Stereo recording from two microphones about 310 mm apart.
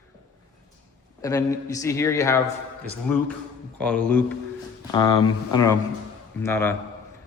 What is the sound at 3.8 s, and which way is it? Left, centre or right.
A man's voice, centre.